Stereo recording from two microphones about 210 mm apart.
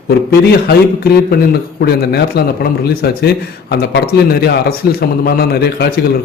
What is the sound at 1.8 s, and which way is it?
Speech, 50° left (ahead or behind).